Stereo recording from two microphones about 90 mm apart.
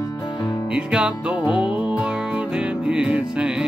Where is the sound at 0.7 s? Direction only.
10° right (ahead or behind).